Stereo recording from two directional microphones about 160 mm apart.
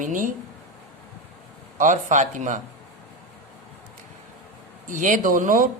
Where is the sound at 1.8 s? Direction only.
50° right (ahead or behind).